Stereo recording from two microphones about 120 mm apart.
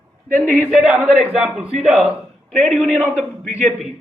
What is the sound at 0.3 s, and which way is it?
Speech, 15° left (ahead or behind).